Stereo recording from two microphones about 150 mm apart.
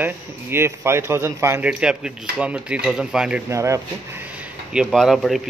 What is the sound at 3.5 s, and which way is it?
Speech, 20° right (ahead or behind).